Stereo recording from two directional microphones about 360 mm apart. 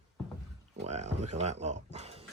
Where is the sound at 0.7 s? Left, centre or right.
Centre.